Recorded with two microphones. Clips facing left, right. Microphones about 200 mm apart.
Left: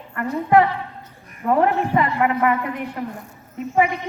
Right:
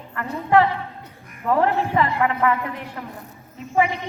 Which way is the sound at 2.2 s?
15° left (ahead or behind).